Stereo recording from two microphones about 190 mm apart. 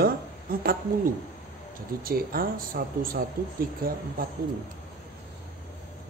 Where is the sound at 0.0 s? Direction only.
50° right (ahead or behind).